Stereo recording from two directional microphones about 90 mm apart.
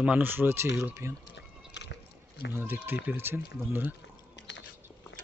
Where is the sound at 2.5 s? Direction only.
25° right (ahead or behind).